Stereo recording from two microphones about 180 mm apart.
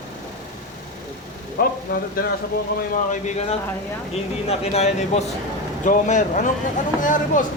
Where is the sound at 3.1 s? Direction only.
40° left (ahead or behind).